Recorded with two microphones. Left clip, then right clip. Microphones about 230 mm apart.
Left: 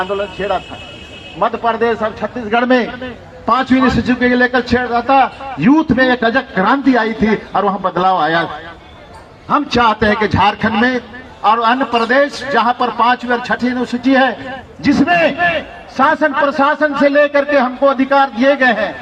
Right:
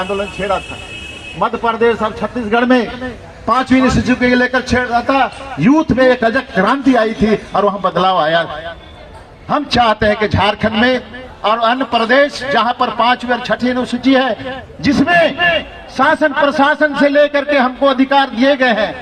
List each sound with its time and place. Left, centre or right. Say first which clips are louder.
0.0 s a man's voice: even; right
3.4 s a man's voice: even; right
6.3 s a man's voice: even; right
9.5 s a man's voice: even; right